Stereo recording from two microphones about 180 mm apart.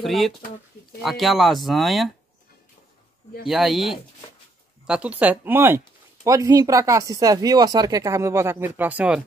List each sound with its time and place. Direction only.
0.0 s speech: centre (ahead or behind)
3.4 s speech: centre (ahead or behind)